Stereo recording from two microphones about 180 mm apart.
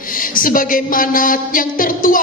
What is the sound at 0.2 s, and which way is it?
A woman's voice, 50° left (ahead or behind).